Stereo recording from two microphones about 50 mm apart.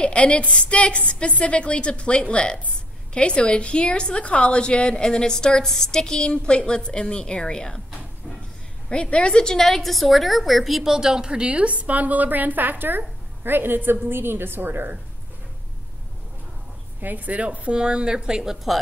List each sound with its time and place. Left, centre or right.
0.0 s a woman's voice: left
8.8 s a woman's voice: left; by 14.9 s right
17.0 s speech: right; by 18.8 s centre